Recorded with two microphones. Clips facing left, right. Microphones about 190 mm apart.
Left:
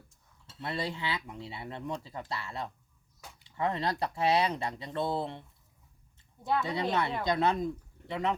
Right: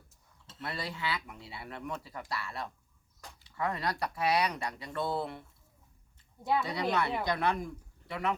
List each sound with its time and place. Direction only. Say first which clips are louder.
0.6 s speech: left 3 dB; 25° left (ahead or behind)
6.4 s speech: even; 10° right (ahead or behind)
6.7 s speech: left 1 dB; 25° left (ahead or behind)